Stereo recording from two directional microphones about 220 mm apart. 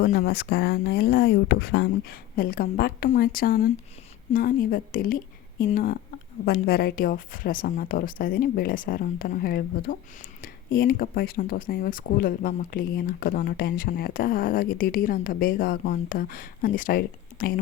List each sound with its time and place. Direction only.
0.0 s speech: 40° left (ahead or behind)